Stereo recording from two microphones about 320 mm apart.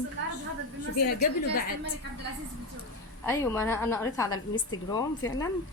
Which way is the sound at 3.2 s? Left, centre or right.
Centre.